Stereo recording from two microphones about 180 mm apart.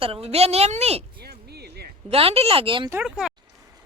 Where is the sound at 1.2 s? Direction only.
60° right (ahead or behind).